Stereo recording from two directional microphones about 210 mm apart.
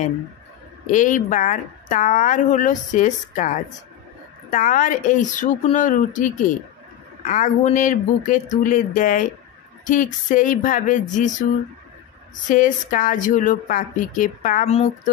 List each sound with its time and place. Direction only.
0.9 s a woman's voice: 35° left (ahead or behind)
12.4 s a woman's voice: 40° left (ahead or behind)